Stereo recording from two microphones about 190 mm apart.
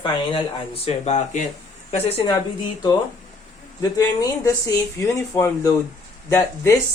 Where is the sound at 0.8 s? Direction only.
35° left (ahead or behind).